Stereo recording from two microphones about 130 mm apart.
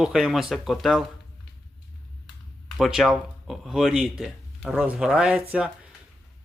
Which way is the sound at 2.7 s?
Centre (ahead or behind).